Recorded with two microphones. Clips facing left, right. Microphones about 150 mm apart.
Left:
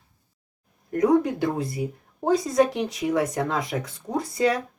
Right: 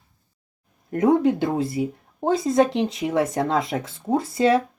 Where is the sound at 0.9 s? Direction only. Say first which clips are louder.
Right 2 dB; 25° right (ahead or behind).